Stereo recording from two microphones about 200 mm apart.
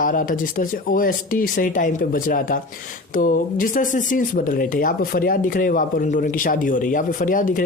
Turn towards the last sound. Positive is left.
turn(degrees=40)  # may be behind; listen again after turning